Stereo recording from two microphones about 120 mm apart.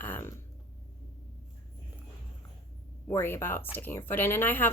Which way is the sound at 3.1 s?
20° left (ahead or behind).